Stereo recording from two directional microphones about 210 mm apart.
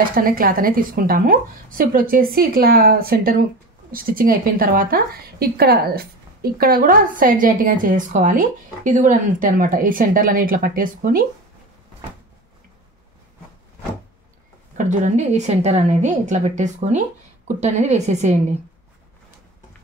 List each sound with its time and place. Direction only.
0.1 s a woman's voice: 45° right (ahead or behind)
14.8 s a woman's voice: 35° right (ahead or behind)